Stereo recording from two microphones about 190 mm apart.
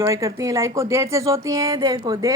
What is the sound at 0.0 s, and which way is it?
A woman's voice, 15° right (ahead or behind).